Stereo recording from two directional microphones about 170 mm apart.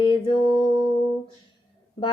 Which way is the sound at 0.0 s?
30° left (ahead or behind).